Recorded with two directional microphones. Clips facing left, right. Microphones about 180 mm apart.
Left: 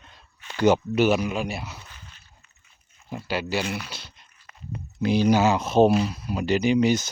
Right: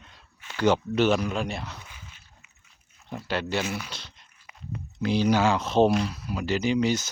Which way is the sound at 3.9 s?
5° left (ahead or behind).